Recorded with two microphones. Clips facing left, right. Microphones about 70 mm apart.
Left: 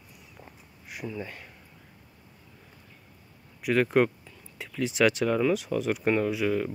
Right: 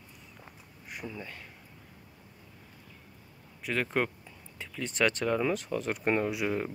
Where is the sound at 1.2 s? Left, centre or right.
Centre.